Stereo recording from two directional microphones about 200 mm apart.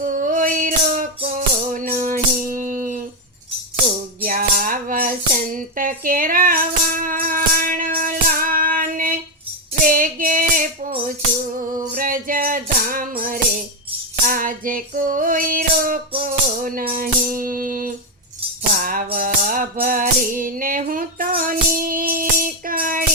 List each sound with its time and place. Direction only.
0.0 s music: 45° right (ahead or behind)
4.2 s music: 45° right (ahead or behind)